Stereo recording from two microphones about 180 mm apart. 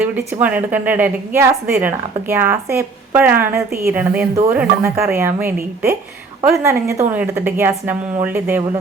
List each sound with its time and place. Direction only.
0.0 s speech: 10° right (ahead or behind)